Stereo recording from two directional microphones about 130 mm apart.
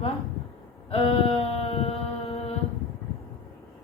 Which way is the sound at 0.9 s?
50° left (ahead or behind).